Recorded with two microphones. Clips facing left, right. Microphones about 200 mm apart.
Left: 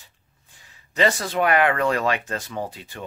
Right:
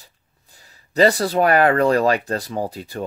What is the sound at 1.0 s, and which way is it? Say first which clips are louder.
A man's voice: right 5 dB; 35° right (ahead or behind).